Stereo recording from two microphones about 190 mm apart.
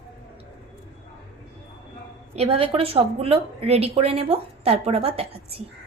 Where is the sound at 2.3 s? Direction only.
30° right (ahead or behind).